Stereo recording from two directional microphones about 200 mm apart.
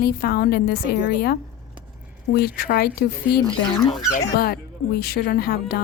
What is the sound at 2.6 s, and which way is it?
Speech, 50° left (ahead or behind).